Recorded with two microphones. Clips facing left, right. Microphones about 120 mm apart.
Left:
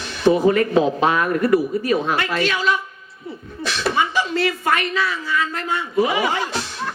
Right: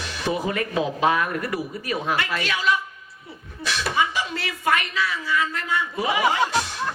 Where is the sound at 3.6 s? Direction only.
45° left (ahead or behind).